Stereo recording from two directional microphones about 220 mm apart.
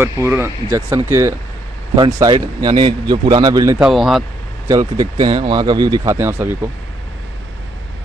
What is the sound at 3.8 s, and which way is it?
Speech, centre (ahead or behind).